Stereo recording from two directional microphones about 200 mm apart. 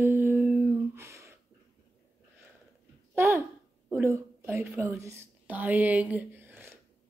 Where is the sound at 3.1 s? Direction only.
10° right (ahead or behind).